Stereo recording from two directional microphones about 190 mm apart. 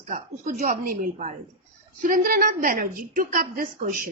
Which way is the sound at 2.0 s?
45° right (ahead or behind).